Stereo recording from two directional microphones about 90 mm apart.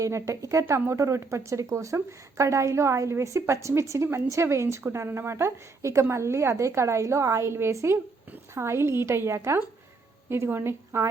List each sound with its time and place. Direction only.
0.0 s a woman's voice: 35° right (ahead or behind)